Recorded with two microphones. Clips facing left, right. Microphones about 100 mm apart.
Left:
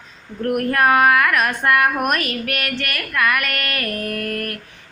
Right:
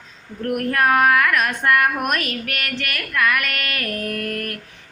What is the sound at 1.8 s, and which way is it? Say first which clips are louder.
Speech: left 2 dB; 40° left (ahead or behind).